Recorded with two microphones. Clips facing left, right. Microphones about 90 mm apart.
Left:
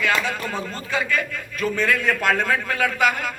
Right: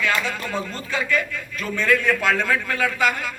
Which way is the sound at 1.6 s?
40° left (ahead or behind).